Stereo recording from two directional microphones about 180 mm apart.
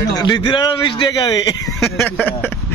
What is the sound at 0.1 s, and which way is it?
A man's voice, 25° left (ahead or behind).